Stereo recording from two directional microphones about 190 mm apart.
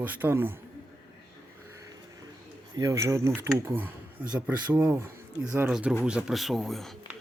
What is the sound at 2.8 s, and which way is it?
Speech, 15° right (ahead or behind).